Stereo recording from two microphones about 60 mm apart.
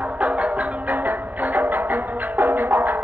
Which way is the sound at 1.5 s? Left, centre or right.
Right.